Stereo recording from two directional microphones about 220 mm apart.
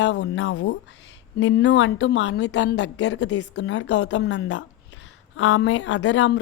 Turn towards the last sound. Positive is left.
turn(degrees=55)  # may be behind; listen again after turning